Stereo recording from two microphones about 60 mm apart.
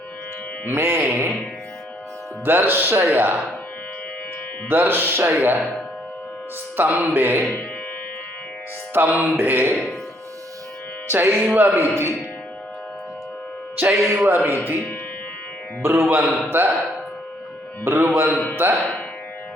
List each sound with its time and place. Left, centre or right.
0.7 s speech: right
1.0 s speech: right
2.4 s speech: right
4.7 s speech: right
6.7 s speech: right
8.9 s music: right
9.4 s speech: right
11.1 s speech: right
13.7 s speech: right
15.8 s a man's voice: right
17.8 s a man's voice: right